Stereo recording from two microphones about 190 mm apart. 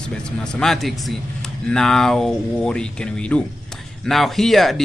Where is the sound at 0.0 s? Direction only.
5° left (ahead or behind).